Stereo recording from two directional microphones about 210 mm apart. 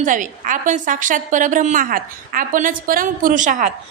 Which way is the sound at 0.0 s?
40° right (ahead or behind).